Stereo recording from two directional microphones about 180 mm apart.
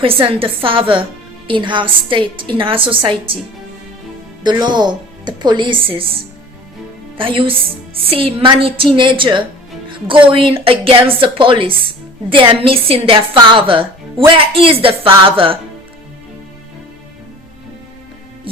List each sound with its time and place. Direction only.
0.0 s a woman's voice: 30° right (ahead or behind)
4.4 s a woman's voice: 25° right (ahead or behind)
7.2 s a woman's voice: 30° right (ahead or behind)
18.5 s hum: 30° right (ahead or behind)